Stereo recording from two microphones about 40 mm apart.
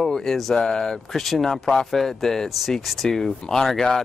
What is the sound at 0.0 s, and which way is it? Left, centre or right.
Speech, centre.